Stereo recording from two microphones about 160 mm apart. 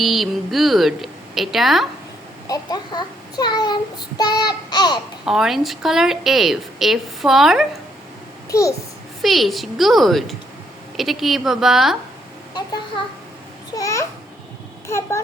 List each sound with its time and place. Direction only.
0.0 s a woman's voice: centre (ahead or behind)
2.5 s a child's voice: 25° left (ahead or behind)
5.2 s a woman's voice: 5° right (ahead or behind)
8.4 s a child's voice: 20° left (ahead or behind)
9.2 s a woman's voice: centre (ahead or behind)
13.7 s babbling: 20° left (ahead or behind)
14.8 s a child's voice: 15° left (ahead or behind)